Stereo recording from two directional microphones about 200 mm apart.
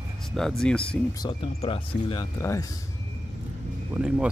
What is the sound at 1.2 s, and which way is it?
Speech, 25° left (ahead or behind).